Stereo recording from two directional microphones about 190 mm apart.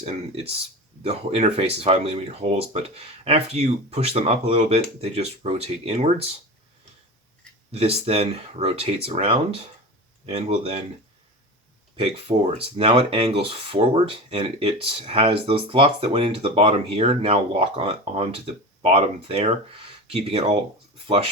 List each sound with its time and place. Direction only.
1.0 s speech: 30° right (ahead or behind)
7.7 s speech: 30° right (ahead or behind)
12.5 s speech: 30° right (ahead or behind)